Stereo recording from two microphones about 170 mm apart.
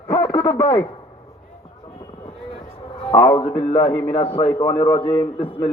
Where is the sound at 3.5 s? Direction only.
15° left (ahead or behind).